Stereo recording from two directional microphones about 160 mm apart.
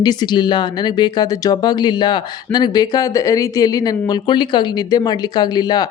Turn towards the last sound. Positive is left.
turn(degrees=25)  # may be behind; listen again after turning